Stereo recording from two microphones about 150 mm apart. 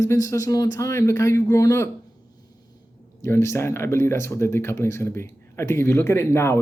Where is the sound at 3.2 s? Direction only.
15° left (ahead or behind).